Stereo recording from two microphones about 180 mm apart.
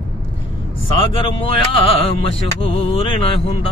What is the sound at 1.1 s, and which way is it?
Music, 30° left (ahead or behind).